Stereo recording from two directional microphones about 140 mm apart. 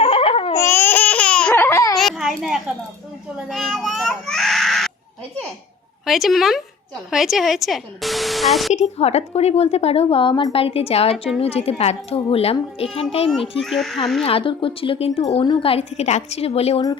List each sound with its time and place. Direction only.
0.0 s babbling: 40° left (ahead or behind)
0.5 s babbling: 15° left (ahead or behind)
2.0 s a sound: centre (ahead or behind)
3.5 s speech: centre (ahead or behind)
6.1 s speech: centre (ahead or behind)
8.7 s a woman's voice: 50° left (ahead or behind)
13.6 s speech: centre (ahead or behind)
14.3 s a woman's voice: 40° left (ahead or behind)